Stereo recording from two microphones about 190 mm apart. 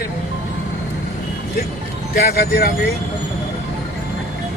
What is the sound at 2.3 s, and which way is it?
Speech, 55° left (ahead or behind).